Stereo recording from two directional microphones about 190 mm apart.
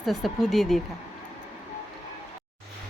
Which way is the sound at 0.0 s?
Centre (ahead or behind).